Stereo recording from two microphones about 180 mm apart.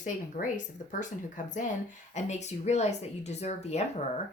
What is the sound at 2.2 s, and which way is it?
Speech, 40° left (ahead or behind).